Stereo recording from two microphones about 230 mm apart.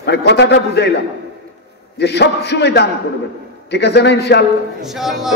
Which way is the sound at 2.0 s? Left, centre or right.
Left.